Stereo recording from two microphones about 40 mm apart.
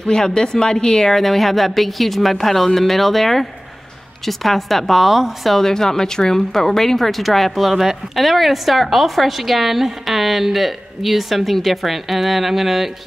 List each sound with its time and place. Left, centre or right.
0.1 s speech: centre
1.1 s speech: centre
5.6 s speech: centre